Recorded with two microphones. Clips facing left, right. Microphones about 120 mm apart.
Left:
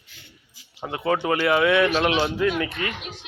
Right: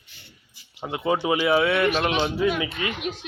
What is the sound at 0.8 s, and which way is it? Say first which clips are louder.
Speech: even; 10° right (ahead or behind).